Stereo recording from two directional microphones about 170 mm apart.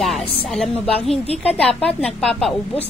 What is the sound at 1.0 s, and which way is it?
A woman's voice, 5° left (ahead or behind).